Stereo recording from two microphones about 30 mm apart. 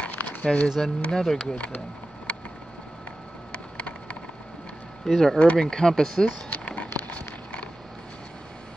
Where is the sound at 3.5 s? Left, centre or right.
Left.